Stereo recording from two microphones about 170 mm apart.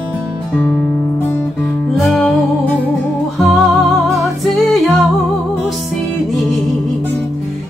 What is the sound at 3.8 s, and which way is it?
Music, centre (ahead or behind).